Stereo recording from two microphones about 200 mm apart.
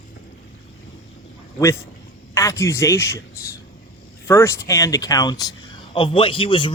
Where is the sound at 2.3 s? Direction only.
15° left (ahead or behind).